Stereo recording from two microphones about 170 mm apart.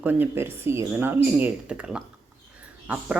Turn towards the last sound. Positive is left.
turn(degrees=-5)  # may be behind; listen again after turning